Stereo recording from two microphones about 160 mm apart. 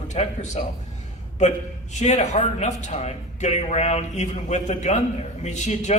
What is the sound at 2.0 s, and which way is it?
A man's voice, 45° left (ahead or behind).